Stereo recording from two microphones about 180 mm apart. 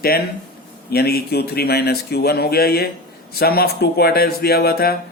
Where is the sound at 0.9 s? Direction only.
60° left (ahead or behind).